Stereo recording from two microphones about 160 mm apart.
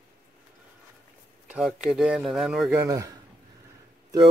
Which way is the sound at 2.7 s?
20° right (ahead or behind).